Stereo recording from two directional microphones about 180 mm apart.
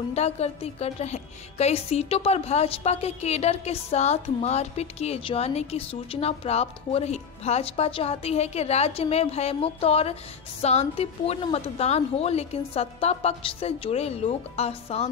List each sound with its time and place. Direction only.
0.1 s a woman's voice: 35° left (ahead or behind)